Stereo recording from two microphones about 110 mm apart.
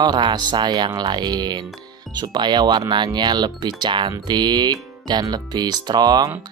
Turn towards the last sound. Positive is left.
turn(degrees=-40)  # may be behind; listen again after turning